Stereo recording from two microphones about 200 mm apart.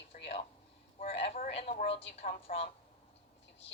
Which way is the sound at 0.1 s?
40° left (ahead or behind).